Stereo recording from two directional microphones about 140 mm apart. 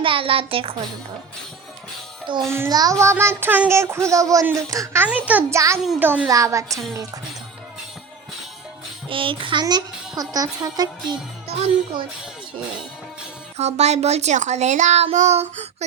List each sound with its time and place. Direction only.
0.0 s a child's voice: 40° right (ahead or behind)
2.5 s child singing: 20° right (ahead or behind)
5.0 s a child's voice: 10° right (ahead or behind)
5.5 s child singing: 20° right (ahead or behind)
6.0 s a child's voice: 15° right (ahead or behind)
6.2 s child singing: 25° right (ahead or behind)
9.0 s a child's voice: 40° right (ahead or behind)
13.6 s speech: 50° right (ahead or behind)